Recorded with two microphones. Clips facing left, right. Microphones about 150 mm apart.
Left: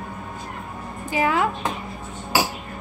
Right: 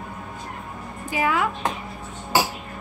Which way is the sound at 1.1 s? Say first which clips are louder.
Left 2 dB; 30° left (ahead or behind).